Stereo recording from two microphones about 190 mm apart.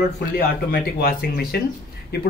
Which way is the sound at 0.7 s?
50° left (ahead or behind).